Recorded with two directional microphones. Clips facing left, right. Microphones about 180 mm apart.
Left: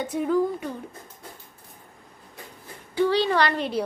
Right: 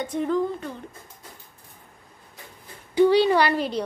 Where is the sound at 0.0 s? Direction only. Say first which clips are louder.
Left 1 dB; 5° left (ahead or behind).